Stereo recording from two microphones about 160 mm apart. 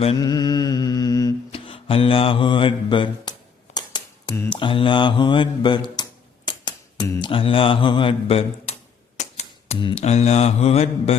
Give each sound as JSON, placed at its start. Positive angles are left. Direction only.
{"t": 0.2, "sound": "music", "side_deg": 25}
{"t": 3.8, "sound": "a sound", "side_deg": 30}
{"t": 7.1, "sound": "speech", "side_deg": 30}
{"t": 9.1, "sound": "typewriter", "side_deg": 45}
{"t": 9.9, "sound": "mantra", "side_deg": 45}